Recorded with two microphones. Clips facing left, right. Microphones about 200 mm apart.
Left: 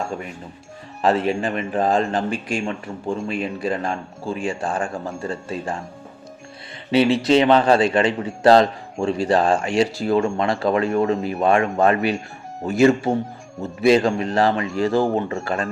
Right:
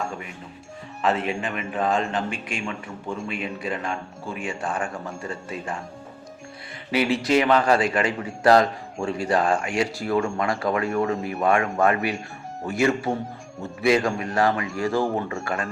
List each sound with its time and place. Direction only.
1.0 s speech: 35° left (ahead or behind)
6.9 s speech: 25° left (ahead or behind)